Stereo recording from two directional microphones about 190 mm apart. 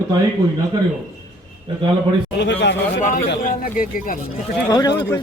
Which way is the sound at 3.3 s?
50° left (ahead or behind).